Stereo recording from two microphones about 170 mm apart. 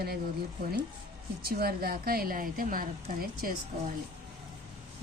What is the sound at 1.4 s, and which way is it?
A woman's voice, 65° right (ahead or behind).